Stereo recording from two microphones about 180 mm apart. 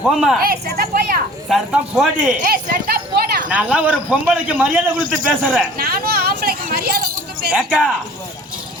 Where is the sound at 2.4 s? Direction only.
55° right (ahead or behind).